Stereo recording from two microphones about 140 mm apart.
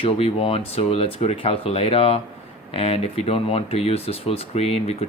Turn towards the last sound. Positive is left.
turn(degrees=45)  # may be behind; listen again after turning